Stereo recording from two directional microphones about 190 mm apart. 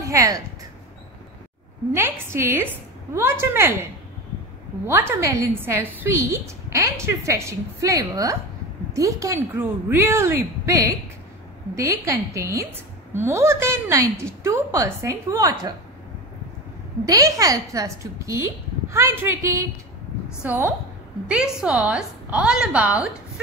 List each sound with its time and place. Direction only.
0.0 s speech: 15° right (ahead or behind)
1.9 s a woman's voice: 15° right (ahead or behind)
4.8 s a woman's voice: 15° right (ahead or behind)
17.0 s a woman's voice: 20° right (ahead or behind)